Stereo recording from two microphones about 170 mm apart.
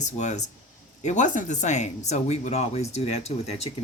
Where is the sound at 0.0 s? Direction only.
45° left (ahead or behind).